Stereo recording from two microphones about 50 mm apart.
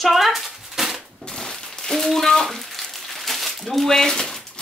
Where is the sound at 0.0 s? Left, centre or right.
Centre.